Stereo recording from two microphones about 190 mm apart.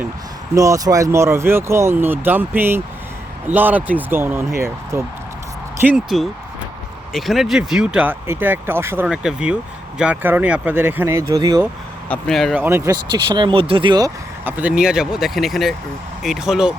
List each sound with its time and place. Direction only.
0.5 s speech: 15° right (ahead or behind)
12.0 s speech: 5° left (ahead or behind)
12.5 s speech: 10° right (ahead or behind)
14.4 s speech: 10° right (ahead or behind)